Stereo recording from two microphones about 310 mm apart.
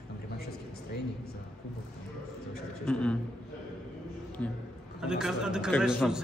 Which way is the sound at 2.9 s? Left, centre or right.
Centre.